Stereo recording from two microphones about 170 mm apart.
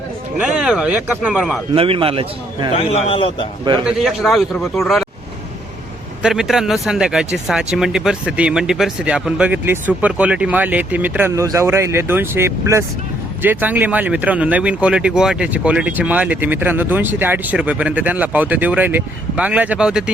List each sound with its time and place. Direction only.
0.3 s speech: 5° right (ahead or behind)
1.7 s a man's voice: 35° right (ahead or behind)
2.7 s a man's voice: 35° left (ahead or behind)
3.8 s speech: centre (ahead or behind)
6.2 s speech: 5° right (ahead or behind)